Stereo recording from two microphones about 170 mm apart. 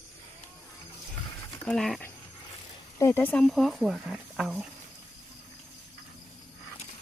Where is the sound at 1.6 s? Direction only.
5° left (ahead or behind).